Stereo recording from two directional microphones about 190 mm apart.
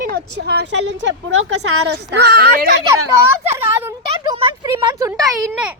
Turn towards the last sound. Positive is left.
turn(degrees=-5)  # may be behind; listen again after turning